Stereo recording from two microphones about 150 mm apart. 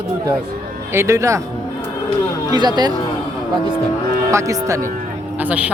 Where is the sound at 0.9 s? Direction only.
20° right (ahead or behind).